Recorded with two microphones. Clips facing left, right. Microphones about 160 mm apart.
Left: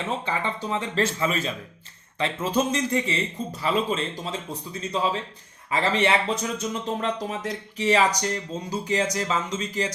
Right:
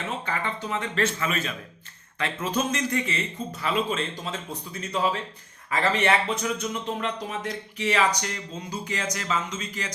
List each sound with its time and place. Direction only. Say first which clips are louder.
0.3 s speech: left 2 dB; 25° left (ahead or behind)